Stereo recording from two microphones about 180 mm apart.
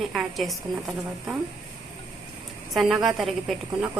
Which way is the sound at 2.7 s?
Centre (ahead or behind).